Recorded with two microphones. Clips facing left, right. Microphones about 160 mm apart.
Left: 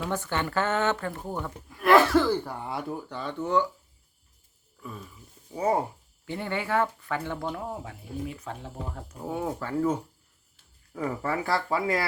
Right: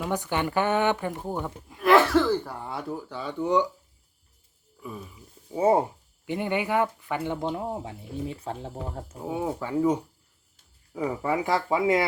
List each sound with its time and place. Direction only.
0.0 s speech: 15° right (ahead or behind)
1.8 s speech: centre (ahead or behind); by 3.7 s 15° right (ahead or behind)
4.8 s speech: 15° right (ahead or behind)
5.5 s speech: 25° right (ahead or behind)
9.2 s speech: 10° right (ahead or behind)